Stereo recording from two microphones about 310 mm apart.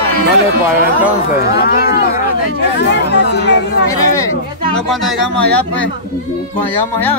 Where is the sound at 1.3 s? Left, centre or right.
Left.